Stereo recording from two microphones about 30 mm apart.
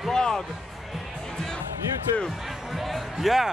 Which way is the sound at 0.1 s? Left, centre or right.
Centre.